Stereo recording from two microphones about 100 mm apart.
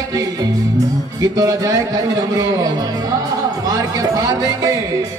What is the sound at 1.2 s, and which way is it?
A man's voice, 40° right (ahead or behind).